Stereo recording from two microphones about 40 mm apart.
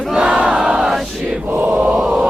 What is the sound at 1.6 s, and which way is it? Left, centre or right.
Mantra, right.